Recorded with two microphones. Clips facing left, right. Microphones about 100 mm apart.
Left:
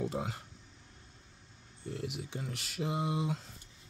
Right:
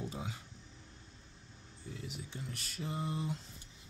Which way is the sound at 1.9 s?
70° left (ahead or behind).